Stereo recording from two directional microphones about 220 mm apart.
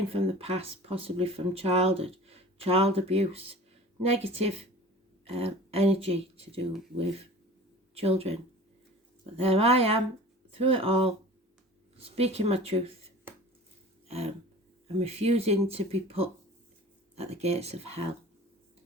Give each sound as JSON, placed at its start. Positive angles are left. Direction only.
{"t": 0.1, "sound": "speech", "side_deg": -25}
{"t": 7.9, "sound": "speech", "side_deg": -25}
{"t": 9.4, "sound": "speech", "side_deg": -25}
{"t": 14.1, "sound": "a sound", "side_deg": -30}
{"t": 14.9, "sound": "speech", "side_deg": -30}